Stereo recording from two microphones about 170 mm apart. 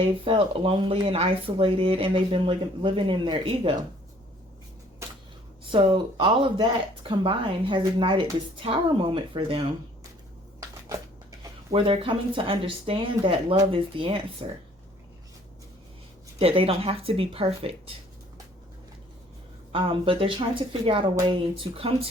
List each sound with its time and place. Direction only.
0.0 s speech: 30° right (ahead or behind)
5.7 s speech: 30° right (ahead or behind)
10.6 s a sound: 20° right (ahead or behind)
11.7 s speech: 30° right (ahead or behind)
16.4 s speech: 35° right (ahead or behind)
19.7 s speech: 30° right (ahead or behind)